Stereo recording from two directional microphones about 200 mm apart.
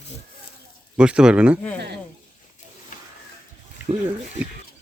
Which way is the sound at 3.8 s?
10° right (ahead or behind).